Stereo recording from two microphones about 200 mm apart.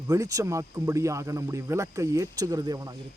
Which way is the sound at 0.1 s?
15° right (ahead or behind).